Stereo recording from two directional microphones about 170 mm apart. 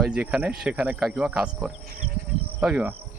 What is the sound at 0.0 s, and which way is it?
Speech, 5° right (ahead or behind).